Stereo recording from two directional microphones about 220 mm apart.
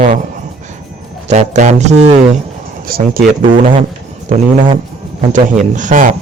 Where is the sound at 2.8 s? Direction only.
40° right (ahead or behind).